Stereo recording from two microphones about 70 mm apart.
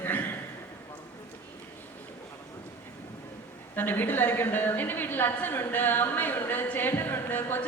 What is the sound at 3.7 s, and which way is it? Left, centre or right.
A woman's voice, left.